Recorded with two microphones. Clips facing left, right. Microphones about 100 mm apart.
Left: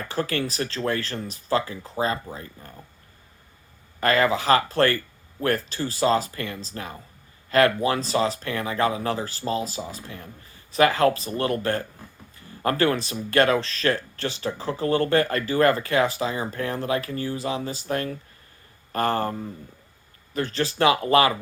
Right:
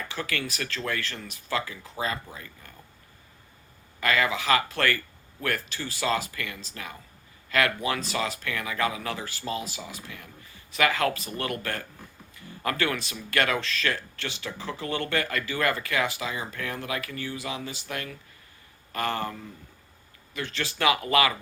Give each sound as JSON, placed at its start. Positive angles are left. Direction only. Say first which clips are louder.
{"t": 0.0, "sound": "speech", "louder": "left 6 dB", "side_deg": 40}
{"t": 4.0, "sound": "speech", "louder": "left 5 dB", "side_deg": 35}